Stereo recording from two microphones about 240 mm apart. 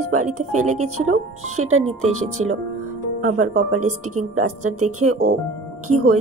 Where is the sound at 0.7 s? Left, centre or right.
Right.